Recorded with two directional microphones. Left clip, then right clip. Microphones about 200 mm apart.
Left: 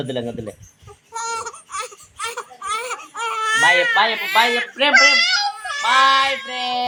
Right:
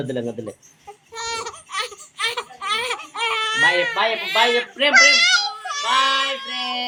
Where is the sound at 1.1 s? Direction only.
Centre (ahead or behind).